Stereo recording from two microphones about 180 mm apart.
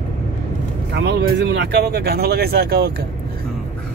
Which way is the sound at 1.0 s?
75° right (ahead or behind).